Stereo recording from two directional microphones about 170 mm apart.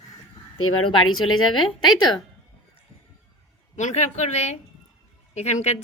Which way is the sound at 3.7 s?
45° left (ahead or behind).